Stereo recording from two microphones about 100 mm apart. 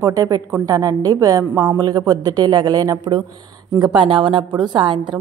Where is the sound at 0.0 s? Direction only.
35° right (ahead or behind).